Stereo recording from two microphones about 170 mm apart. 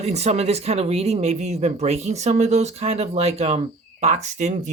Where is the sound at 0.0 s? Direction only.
40° right (ahead or behind).